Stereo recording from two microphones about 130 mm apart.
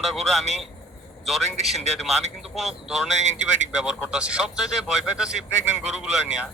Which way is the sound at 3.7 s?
5° right (ahead or behind).